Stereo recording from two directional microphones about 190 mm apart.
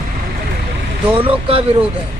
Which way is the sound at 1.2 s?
30° right (ahead or behind).